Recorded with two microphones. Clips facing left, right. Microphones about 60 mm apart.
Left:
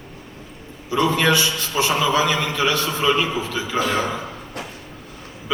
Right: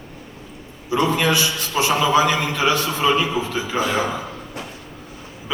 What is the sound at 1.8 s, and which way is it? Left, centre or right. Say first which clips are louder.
A man's voice: right 2 dB; right.